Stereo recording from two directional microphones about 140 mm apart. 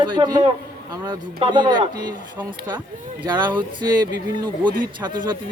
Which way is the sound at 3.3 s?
35° right (ahead or behind).